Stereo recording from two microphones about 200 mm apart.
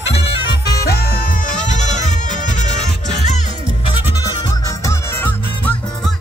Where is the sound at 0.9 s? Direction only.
50° left (ahead or behind); by 3.4 s 35° left (ahead or behind).